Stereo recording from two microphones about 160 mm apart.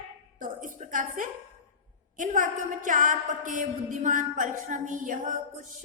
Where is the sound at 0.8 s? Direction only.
55° right (ahead or behind).